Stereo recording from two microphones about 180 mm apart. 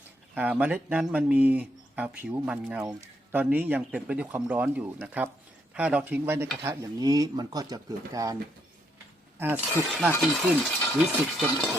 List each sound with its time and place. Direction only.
0.3 s speech: 5° right (ahead or behind)
9.4 s speech: 10° right (ahead or behind)
10.9 s speech: centre (ahead or behind)